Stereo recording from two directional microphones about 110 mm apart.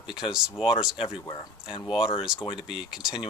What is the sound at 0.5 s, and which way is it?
Speech, 50° left (ahead or behind).